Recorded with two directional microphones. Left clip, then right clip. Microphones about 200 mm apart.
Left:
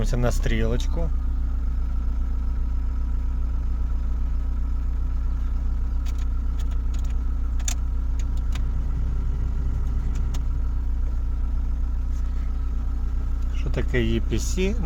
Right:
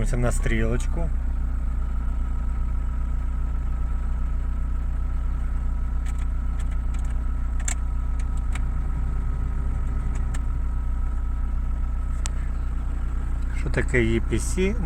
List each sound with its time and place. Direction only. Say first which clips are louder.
0.0 s speech: left 1 dB; 5° left (ahead or behind)
13.7 s speech: right 3 dB; 5° left (ahead or behind)